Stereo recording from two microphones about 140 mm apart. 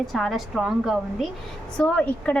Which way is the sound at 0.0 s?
Centre (ahead or behind).